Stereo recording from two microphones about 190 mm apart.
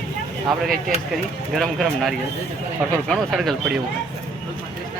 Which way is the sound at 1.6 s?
Centre (ahead or behind).